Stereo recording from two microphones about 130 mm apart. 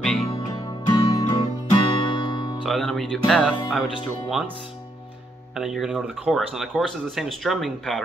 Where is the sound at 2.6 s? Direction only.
Centre (ahead or behind).